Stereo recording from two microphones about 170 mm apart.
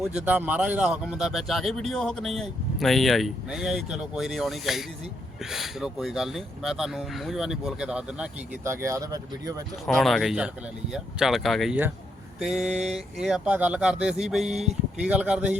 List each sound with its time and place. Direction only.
0.3 s a man's voice: 10° right (ahead or behind)
8.6 s speech: 15° right (ahead or behind)
9.8 s a man's voice: centre (ahead or behind)